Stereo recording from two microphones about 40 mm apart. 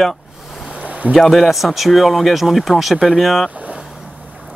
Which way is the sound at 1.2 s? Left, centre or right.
Centre.